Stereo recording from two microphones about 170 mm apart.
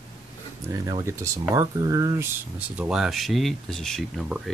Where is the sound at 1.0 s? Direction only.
15° right (ahead or behind).